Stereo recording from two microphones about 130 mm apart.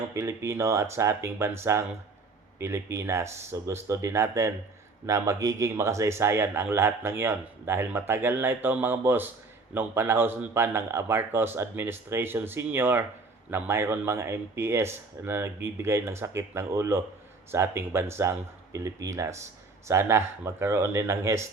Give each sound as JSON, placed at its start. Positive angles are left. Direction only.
{"t": 0.1, "sound": "speech", "side_deg": -20}